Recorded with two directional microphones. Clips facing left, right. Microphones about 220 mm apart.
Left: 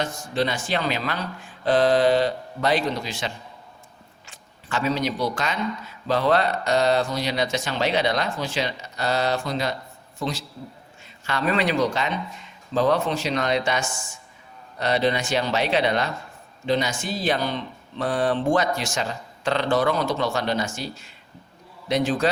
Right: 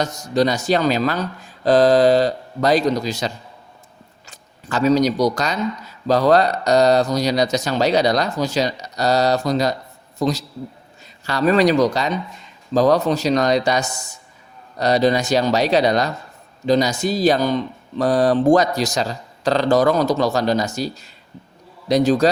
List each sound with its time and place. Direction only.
0.0 s a man's voice: 40° right (ahead or behind)